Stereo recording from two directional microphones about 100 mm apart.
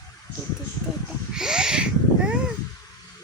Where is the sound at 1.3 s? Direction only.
5° right (ahead or behind).